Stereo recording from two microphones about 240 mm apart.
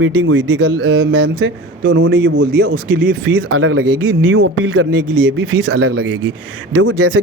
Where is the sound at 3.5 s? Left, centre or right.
Right.